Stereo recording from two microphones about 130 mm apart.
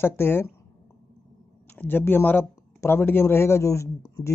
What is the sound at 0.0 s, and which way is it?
Speech, 20° left (ahead or behind).